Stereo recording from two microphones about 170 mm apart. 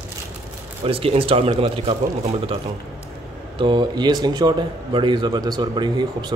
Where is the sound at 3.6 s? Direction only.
25° right (ahead or behind).